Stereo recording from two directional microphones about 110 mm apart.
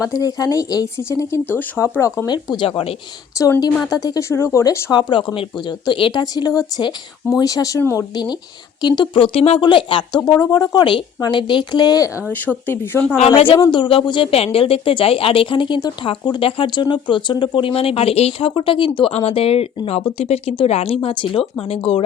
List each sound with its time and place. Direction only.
0.0 s speech: 35° left (ahead or behind)
1.5 s speech: 15° left (ahead or behind)
1.8 s speech: 30° left (ahead or behind)
2.2 s speech: 40° left (ahead or behind)
2.6 s speech: 60° left (ahead or behind)
3.3 s speech: 30° left (ahead or behind)
4.9 s speech: 45° left (ahead or behind); by 8.0 s 20° left (ahead or behind)
8.1 s speech: 40° left (ahead or behind); by 9.6 s 60° left (ahead or behind)
9.6 s speech: 45° left (ahead or behind)
10.2 s speech: 35° left (ahead or behind)
12.3 s speech: 20° left (ahead or behind)
13.1 s speech: 60° left (ahead or behind)
19.1 s speech: 60° left (ahead or behind)